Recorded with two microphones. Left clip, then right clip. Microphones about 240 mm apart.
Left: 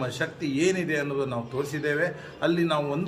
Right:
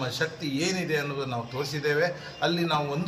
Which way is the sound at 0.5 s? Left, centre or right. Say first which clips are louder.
Left 3 dB; left.